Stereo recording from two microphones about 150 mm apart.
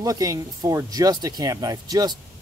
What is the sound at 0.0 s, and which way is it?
Speech, 25° right (ahead or behind).